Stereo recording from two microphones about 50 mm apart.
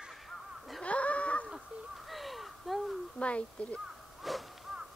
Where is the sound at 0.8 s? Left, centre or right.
Left.